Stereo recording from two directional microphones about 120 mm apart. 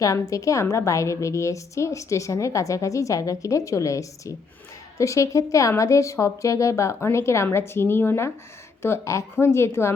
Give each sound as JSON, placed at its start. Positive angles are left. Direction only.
{"t": 0.0, "sound": "a woman's voice", "side_deg": 30}